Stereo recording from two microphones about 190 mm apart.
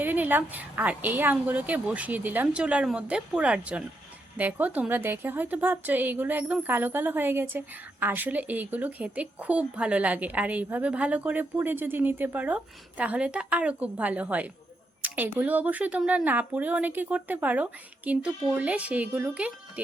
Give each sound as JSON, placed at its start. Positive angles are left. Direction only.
{"t": 0.0, "sound": "a woman's voice", "side_deg": -10}